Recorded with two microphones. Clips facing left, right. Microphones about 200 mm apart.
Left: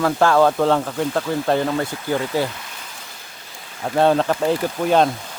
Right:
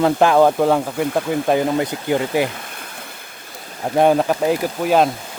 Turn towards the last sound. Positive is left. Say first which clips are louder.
# right 1 dB
turn(degrees=-5)  # may be behind; listen again after turning